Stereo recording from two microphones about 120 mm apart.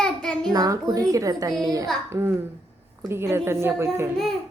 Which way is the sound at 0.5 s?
30° right (ahead or behind).